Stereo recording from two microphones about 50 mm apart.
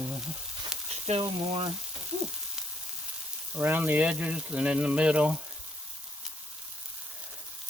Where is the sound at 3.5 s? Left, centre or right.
Right.